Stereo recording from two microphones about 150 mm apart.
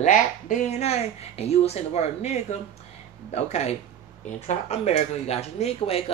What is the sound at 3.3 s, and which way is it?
Speech, 45° left (ahead or behind).